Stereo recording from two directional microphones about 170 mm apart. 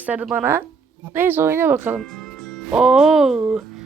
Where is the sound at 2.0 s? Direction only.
Centre (ahead or behind).